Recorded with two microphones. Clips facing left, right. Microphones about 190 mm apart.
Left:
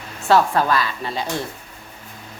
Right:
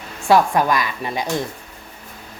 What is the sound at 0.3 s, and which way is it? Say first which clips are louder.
A woman's voice: right 1 dB; 15° right (ahead or behind).